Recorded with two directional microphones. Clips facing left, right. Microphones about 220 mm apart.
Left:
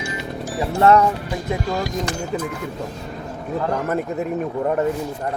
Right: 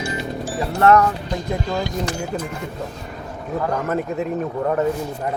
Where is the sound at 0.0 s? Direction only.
30° right (ahead or behind).